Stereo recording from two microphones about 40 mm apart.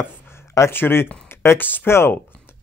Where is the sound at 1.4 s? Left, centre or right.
Left.